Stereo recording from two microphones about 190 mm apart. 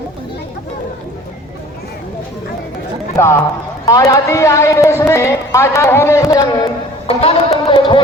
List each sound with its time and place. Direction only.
3.2 s a woman's voice: 15° left (ahead or behind)
7.1 s music: 30° left (ahead or behind)